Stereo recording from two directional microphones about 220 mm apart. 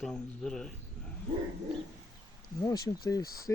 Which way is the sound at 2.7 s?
15° left (ahead or behind).